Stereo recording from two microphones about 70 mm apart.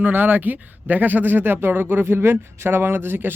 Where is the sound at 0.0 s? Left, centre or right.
Right.